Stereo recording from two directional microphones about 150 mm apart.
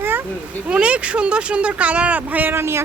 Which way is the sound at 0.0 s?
15° right (ahead or behind).